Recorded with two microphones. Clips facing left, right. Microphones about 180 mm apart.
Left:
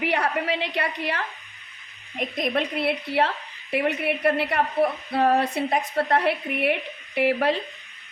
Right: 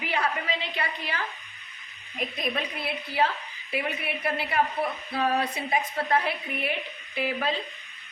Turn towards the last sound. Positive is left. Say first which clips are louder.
# left 7 dB
turn(degrees=70)  # may be behind; listen again after turning